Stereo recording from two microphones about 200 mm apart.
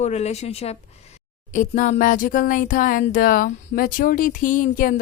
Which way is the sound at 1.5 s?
40° left (ahead or behind).